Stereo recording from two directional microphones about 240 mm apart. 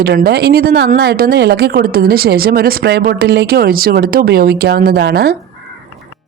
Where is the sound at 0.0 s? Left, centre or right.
Right.